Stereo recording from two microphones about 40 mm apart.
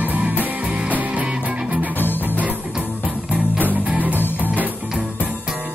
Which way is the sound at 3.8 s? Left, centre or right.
Right.